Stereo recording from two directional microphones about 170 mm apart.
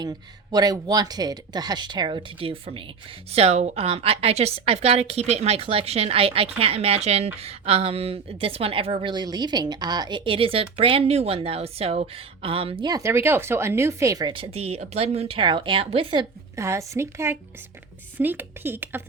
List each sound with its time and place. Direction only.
0.0 s a woman's voice: 25° right (ahead or behind)
16.6 s speech: 15° right (ahead or behind)